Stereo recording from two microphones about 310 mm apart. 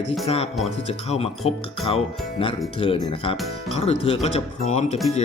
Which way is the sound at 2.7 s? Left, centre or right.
Centre.